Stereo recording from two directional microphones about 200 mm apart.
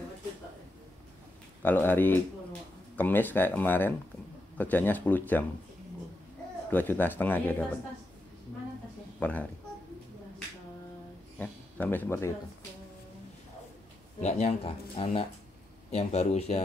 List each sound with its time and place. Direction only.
1.6 s speech: 10° left (ahead or behind)
6.7 s speech: 10° left (ahead or behind)
9.2 s speech: 10° left (ahead or behind)
11.3 s speech: 10° left (ahead or behind)
14.2 s speech: 30° left (ahead or behind)